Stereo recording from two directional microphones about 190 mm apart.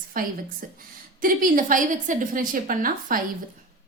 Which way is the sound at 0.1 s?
50° right (ahead or behind).